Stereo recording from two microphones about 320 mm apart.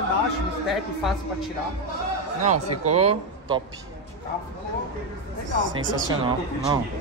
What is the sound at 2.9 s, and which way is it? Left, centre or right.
Speech, centre.